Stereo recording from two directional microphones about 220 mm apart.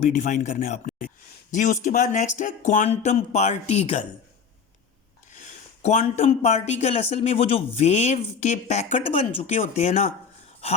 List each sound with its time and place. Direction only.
0.0 s speech: 30° left (ahead or behind)
5.3 s speech: 35° left (ahead or behind)